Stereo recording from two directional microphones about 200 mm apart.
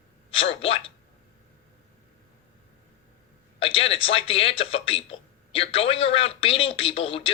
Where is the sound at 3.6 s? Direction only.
30° left (ahead or behind).